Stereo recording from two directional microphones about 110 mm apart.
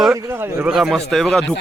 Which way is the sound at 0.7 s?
Centre (ahead or behind).